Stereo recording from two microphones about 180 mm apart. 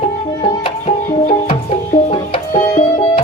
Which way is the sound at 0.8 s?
35° left (ahead or behind).